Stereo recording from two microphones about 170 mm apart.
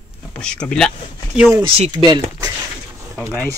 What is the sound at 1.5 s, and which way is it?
Speech, 30° right (ahead or behind).